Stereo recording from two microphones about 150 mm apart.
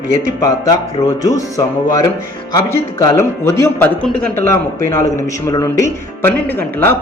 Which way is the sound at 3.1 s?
15° left (ahead or behind).